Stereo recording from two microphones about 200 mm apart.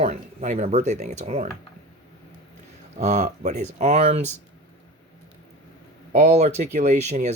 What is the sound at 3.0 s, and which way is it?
Speech, 35° right (ahead or behind).